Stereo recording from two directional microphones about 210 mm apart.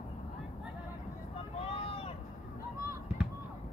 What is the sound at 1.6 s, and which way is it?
Vehicle, 25° left (ahead or behind).